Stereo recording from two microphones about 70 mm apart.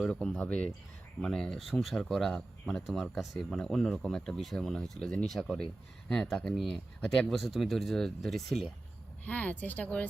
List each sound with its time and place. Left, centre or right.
0.0 s speech: centre
9.2 s speech: left